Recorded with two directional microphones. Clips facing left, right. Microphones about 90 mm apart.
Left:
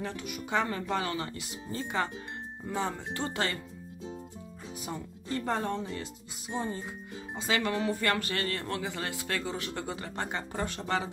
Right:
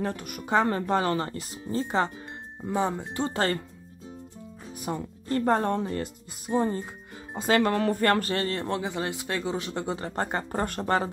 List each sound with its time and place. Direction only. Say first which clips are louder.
0.0 s speech: right 5 dB; 45° right (ahead or behind); by 2.0 s 30° right (ahead or behind)
2.7 s speech: right 6 dB; 15° right (ahead or behind)
4.8 s speech: right 7 dB; 50° right (ahead or behind)